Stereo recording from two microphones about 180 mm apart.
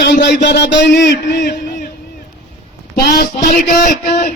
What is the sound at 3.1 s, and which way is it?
Speech, 55° left (ahead or behind).